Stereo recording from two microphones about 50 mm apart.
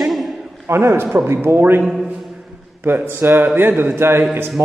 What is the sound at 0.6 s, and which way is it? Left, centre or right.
Speech, right.